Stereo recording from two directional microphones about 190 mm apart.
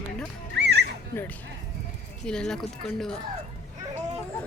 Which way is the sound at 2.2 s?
5° left (ahead or behind).